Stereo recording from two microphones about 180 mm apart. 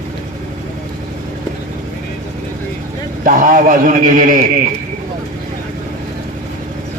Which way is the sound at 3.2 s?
50° right (ahead or behind).